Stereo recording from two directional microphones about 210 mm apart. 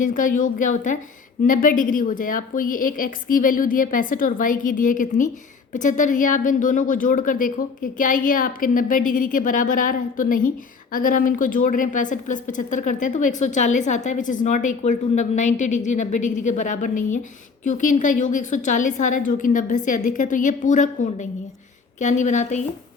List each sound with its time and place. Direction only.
0.0 s a woman's voice: 40° left (ahead or behind)